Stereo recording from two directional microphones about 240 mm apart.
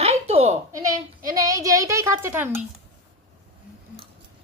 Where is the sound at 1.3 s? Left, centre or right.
Centre.